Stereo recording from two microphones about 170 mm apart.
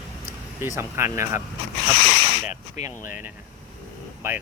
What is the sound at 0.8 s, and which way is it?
Speech, 15° right (ahead or behind).